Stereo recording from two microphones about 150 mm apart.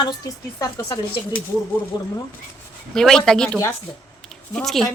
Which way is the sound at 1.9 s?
25° left (ahead or behind).